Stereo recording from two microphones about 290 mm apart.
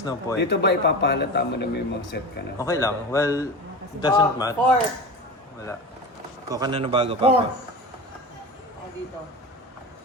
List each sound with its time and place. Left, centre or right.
0.0 s a man's voice: centre
0.3 s speech: left
2.6 s a man's voice: centre
6.5 s a man's voice: centre